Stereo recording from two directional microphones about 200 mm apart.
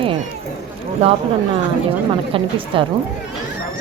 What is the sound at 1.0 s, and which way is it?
Speech, 30° right (ahead or behind).